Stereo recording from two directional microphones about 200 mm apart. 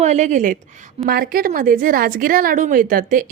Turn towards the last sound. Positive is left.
turn(degrees=-45)  # may be behind; listen again after turning